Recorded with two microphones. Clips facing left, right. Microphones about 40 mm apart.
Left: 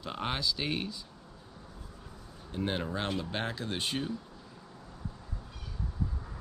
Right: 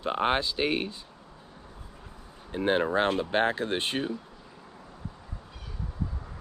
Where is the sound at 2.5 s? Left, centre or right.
Right.